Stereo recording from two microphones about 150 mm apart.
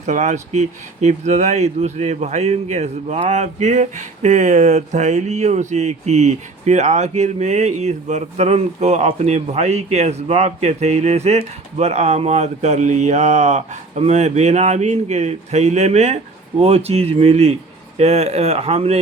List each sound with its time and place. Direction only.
0.0 s speech: 50° right (ahead or behind)